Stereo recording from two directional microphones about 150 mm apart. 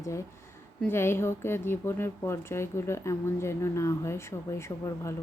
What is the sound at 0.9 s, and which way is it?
A woman's voice, 15° left (ahead or behind).